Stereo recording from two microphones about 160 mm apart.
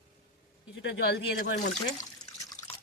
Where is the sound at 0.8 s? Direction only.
90° left.